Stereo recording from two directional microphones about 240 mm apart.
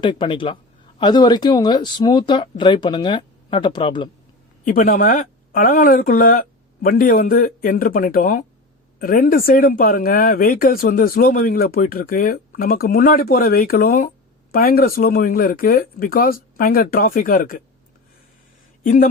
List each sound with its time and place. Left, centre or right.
0.0 s speech: left
4.6 s speech: left
18.8 s speech: left